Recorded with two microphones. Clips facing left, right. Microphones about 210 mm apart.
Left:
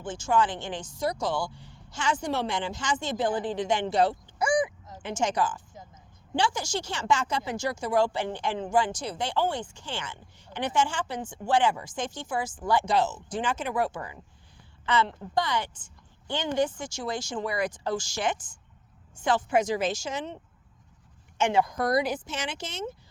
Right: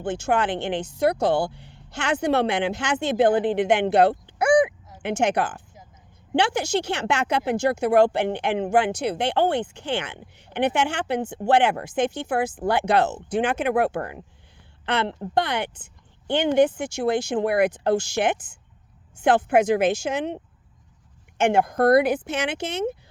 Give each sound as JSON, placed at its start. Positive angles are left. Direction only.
{"t": 0.0, "sound": "speech", "side_deg": -60}